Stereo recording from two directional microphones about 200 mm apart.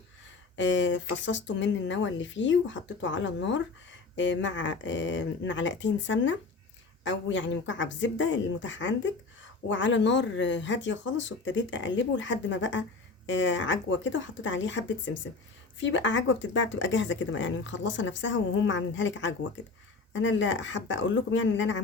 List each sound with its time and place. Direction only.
0.5 s speech: 65° left (ahead or behind)